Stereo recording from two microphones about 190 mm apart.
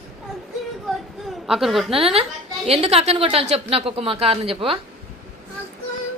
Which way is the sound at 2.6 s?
30° right (ahead or behind).